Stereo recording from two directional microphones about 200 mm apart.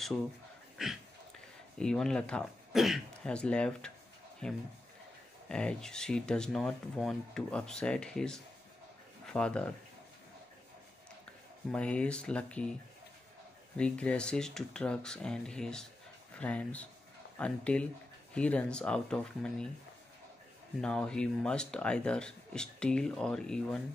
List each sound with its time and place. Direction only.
0.8 s speech: centre (ahead or behind)
11.7 s speech: 5° left (ahead or behind)
13.7 s speech: 5° left (ahead or behind)
20.8 s speech: 5° left (ahead or behind)